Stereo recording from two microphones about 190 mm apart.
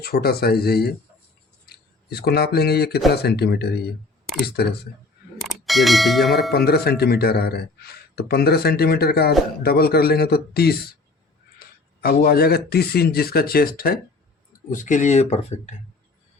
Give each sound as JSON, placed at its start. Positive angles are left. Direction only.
{"t": 0.0, "sound": "speech", "side_deg": 55}
{"t": 5.4, "sound": "bell", "side_deg": 0}
{"t": 6.7, "sound": "speech", "side_deg": 55}